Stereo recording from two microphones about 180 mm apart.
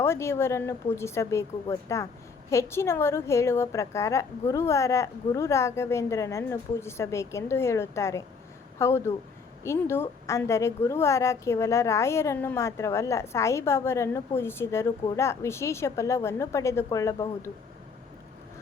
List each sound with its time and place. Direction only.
0.0 s a woman's voice: 15° left (ahead or behind)